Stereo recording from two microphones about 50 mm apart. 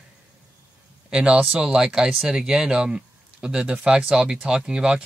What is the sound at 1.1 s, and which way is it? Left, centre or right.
Speech, centre.